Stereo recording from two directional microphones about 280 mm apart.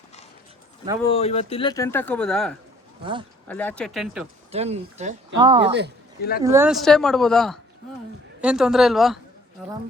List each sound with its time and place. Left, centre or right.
1.0 s speech: left; by 2.6 s centre
3.0 s speech: centre
3.5 s speech: centre
4.5 s speech: right; by 9.1 s centre